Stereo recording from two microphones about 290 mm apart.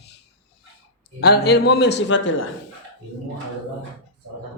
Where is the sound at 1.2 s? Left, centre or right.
Left.